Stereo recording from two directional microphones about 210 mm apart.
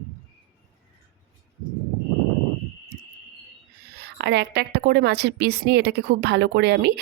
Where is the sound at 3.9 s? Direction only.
50° right (ahead or behind).